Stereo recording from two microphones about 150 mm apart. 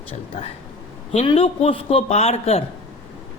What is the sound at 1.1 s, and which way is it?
Speech, 40° left (ahead or behind).